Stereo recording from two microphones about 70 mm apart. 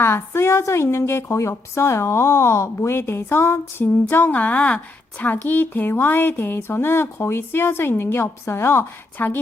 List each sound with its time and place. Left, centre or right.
0.0 s speech: left
4.1 s speech: left